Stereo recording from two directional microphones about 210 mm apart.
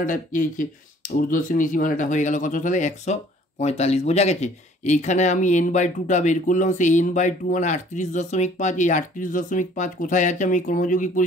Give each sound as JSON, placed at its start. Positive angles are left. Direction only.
{"t": 0.0, "sound": "speech", "side_deg": 40}